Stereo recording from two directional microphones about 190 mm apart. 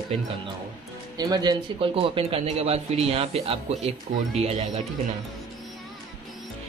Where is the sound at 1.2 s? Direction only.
20° right (ahead or behind).